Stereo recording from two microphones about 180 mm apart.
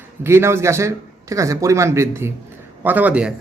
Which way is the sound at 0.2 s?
15° right (ahead or behind).